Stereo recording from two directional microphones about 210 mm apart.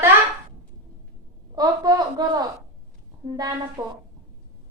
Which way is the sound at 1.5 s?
20° right (ahead or behind).